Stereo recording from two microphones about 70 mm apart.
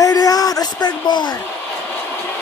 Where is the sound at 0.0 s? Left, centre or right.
Left.